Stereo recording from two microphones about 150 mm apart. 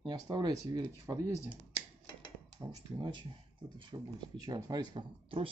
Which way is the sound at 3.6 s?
30° right (ahead or behind).